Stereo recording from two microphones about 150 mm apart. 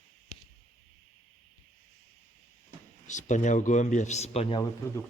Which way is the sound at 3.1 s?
55° left (ahead or behind).